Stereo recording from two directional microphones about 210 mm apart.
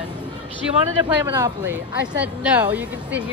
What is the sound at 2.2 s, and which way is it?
Speech, 5° right (ahead or behind).